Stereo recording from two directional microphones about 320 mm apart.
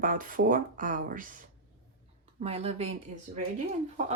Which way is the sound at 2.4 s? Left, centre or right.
Centre.